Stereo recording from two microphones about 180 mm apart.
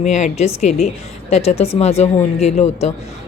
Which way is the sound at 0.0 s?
40° left (ahead or behind).